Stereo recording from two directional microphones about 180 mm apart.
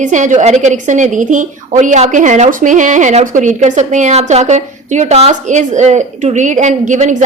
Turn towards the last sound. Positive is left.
turn(degrees=-45)  # may be behind; listen again after turning